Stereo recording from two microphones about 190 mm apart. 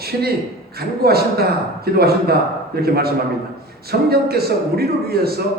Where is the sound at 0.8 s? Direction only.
55° right (ahead or behind).